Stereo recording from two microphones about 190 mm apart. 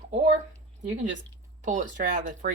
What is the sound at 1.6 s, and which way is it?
Speech, 45° right (ahead or behind).